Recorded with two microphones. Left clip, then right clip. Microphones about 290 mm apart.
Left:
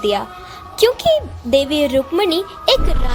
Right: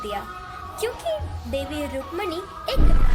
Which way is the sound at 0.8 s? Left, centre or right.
Left.